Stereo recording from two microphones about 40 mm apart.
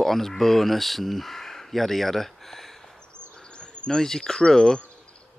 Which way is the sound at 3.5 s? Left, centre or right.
Left.